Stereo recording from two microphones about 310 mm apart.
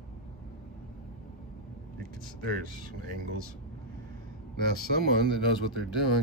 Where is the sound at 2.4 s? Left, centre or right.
Right.